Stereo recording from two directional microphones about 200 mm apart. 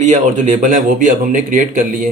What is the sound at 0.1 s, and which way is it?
A man's voice, 35° right (ahead or behind).